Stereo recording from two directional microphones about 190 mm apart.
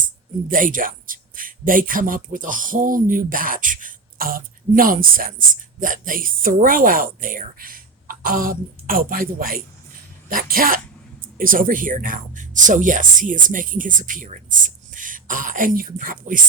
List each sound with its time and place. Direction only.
0.4 s speech: 45° right (ahead or behind)